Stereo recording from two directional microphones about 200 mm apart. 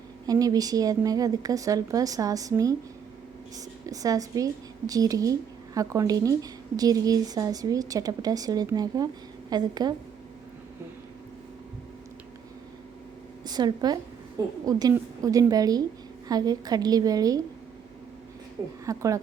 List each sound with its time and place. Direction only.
0.3 s speech: 20° right (ahead or behind)
3.8 s a woman's voice: 15° right (ahead or behind)
13.4 s a woman's voice: 20° right (ahead or behind)
18.9 s speech: 15° right (ahead or behind)